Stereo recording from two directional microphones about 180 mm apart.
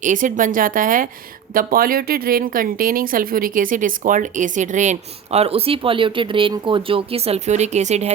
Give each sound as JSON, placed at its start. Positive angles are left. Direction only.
{"t": 0.0, "sound": "speech", "side_deg": -45}